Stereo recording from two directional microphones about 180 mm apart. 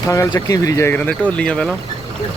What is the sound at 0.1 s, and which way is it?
Speech, 15° left (ahead or behind).